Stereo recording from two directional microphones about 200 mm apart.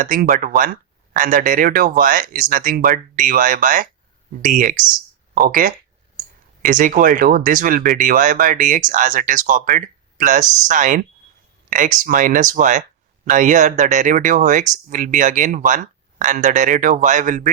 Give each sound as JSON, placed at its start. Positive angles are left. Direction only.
{"t": 0.0, "sound": "speech", "side_deg": -40}